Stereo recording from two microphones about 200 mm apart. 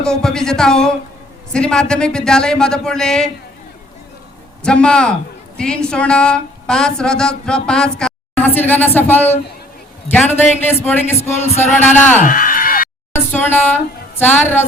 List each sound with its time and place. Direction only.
0.0 s speech: 5° left (ahead or behind)
4.6 s a man's voice: 5° left (ahead or behind)
11.2 s a sound: 35° left (ahead or behind)
13.1 s a man's voice: 10° left (ahead or behind)